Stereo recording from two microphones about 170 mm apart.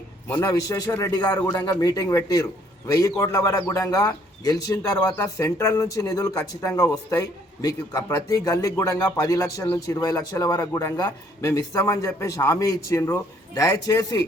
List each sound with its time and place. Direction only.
0.3 s speech: 15° left (ahead or behind)